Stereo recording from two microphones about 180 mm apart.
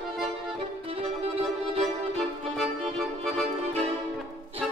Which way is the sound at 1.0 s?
35° right (ahead or behind).